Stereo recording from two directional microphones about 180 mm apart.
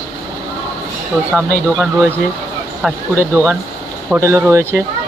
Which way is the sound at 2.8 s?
15° right (ahead or behind).